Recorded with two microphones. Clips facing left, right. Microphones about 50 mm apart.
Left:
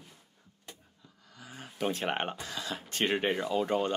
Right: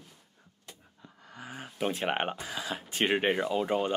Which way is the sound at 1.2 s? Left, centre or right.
Right.